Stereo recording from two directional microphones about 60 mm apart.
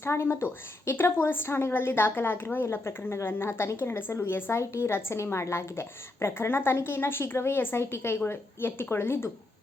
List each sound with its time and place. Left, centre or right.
0.0 s a woman's voice: left
2.7 s a woman's voice: left